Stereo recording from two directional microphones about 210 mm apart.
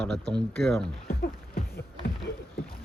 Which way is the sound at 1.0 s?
45° left (ahead or behind).